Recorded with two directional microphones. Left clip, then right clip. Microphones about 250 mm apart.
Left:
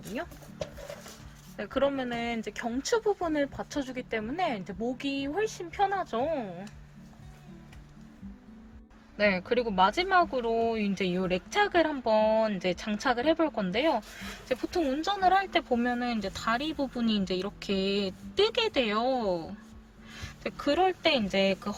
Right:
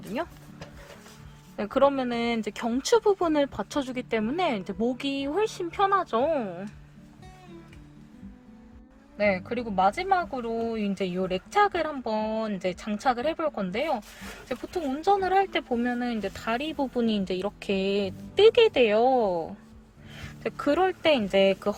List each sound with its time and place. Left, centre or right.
1.5 s speech: right
9.1 s speech: centre
20.4 s speech: centre